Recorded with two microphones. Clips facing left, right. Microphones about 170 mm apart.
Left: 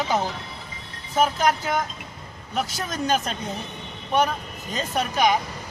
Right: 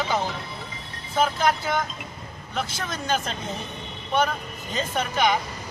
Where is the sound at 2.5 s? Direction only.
40° left (ahead or behind).